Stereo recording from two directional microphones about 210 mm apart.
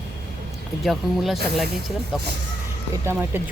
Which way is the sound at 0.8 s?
Centre (ahead or behind).